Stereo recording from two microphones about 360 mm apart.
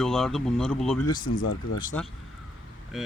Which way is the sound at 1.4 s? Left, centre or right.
Left.